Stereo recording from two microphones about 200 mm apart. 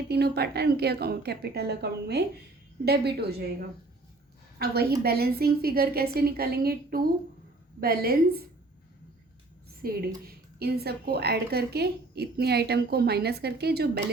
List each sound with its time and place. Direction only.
0.1 s a woman's voice: 55° right (ahead or behind)
4.6 s a woman's voice: 50° right (ahead or behind)
9.8 s a woman's voice: 50° right (ahead or behind)